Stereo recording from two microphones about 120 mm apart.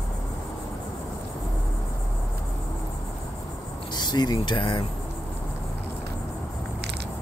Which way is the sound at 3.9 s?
35° left (ahead or behind).